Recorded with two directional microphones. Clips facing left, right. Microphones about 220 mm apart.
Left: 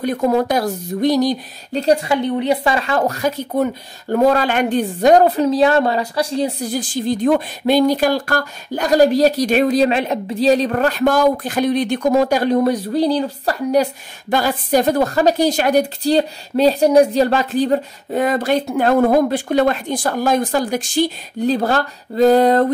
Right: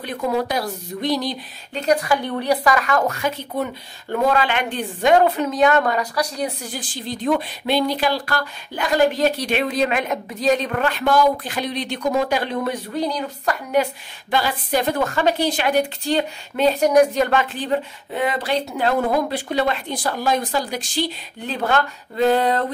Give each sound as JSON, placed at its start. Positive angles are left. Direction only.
{"t": 0.0, "sound": "speech", "side_deg": 45}
{"t": 6.7, "sound": "a woman's voice", "side_deg": 45}